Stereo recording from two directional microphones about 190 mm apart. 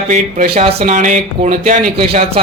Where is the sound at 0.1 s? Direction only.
40° right (ahead or behind).